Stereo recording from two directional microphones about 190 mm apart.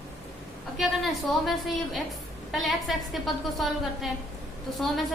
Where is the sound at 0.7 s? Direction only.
Centre (ahead or behind).